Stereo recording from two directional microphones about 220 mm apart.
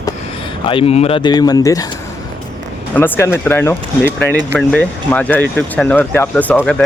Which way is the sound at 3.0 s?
10° left (ahead or behind).